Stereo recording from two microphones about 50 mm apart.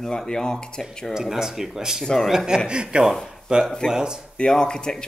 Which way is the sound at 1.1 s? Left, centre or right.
Centre.